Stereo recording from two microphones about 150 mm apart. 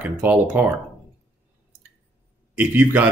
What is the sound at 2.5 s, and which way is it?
Speech, 10° right (ahead or behind).